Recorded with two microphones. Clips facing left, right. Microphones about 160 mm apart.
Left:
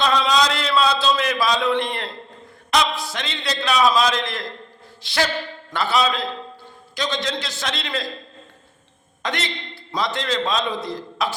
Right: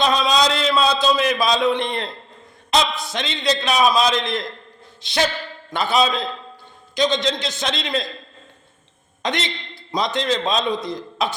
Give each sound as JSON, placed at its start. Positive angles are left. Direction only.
{"t": 0.0, "sound": "a sound", "side_deg": -20}
{"t": 2.6, "sound": "a man's voice", "side_deg": -20}
{"t": 9.2, "sound": "a man's voice", "side_deg": -20}